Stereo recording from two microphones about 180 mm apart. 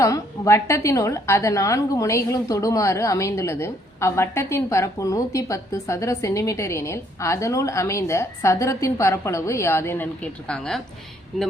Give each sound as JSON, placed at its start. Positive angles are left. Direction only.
{"t": 0.0, "sound": "a woman's voice", "side_deg": 15}